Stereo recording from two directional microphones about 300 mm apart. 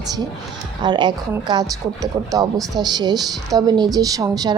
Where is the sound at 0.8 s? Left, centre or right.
Centre.